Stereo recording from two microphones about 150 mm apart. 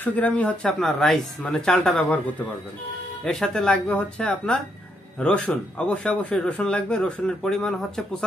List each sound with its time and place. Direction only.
0.0 s speech: 10° left (ahead or behind)
3.3 s a man's voice: 5° left (ahead or behind)